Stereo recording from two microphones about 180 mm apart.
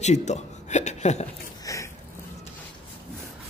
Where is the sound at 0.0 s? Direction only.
40° left (ahead or behind).